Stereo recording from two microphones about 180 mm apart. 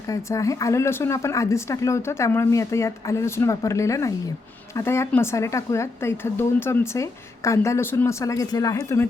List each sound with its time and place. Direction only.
0.1 s a woman's voice: 15° left (ahead or behind)